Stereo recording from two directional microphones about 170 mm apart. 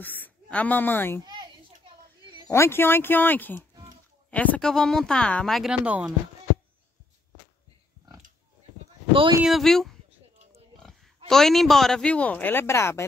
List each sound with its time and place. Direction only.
0.0 s speech: 10° left (ahead or behind)
2.5 s speech: 15° left (ahead or behind); by 6.1 s 5° right (ahead or behind)
9.1 s speech: 30° right (ahead or behind)
9.4 s speech: centre (ahead or behind)
11.2 s speech: centre (ahead or behind)